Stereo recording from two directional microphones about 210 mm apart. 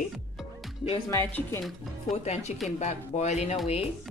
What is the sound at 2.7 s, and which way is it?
Speech, 35° left (ahead or behind).